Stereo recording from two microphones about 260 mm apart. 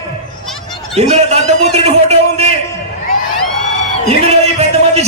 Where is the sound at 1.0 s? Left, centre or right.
Right.